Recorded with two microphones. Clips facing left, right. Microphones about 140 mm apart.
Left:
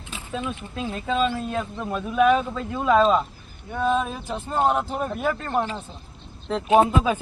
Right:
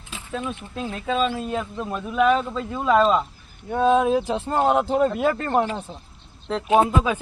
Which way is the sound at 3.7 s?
20° right (ahead or behind).